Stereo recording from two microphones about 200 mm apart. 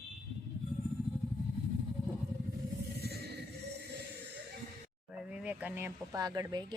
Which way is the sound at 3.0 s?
55° right (ahead or behind).